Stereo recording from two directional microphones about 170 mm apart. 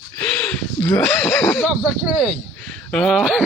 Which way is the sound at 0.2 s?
10° left (ahead or behind).